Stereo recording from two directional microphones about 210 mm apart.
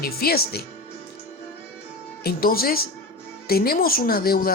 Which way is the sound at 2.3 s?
45° left (ahead or behind).